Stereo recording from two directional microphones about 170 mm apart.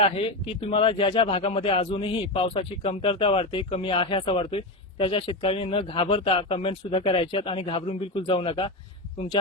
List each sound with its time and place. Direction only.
0.0 s a man's voice: 35° left (ahead or behind)